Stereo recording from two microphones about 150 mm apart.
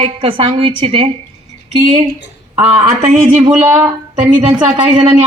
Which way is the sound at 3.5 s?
10° right (ahead or behind).